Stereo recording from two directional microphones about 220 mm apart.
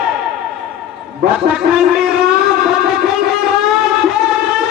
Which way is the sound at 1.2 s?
45° right (ahead or behind).